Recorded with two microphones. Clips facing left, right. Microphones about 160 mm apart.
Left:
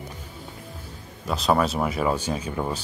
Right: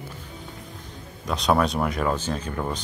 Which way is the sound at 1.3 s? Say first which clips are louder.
Even; centre (ahead or behind).